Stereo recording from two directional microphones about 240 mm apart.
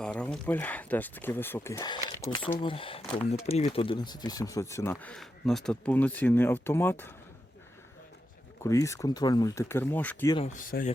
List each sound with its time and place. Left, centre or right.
0.0 s speech: centre
8.6 s speech: centre
10.3 s speech: left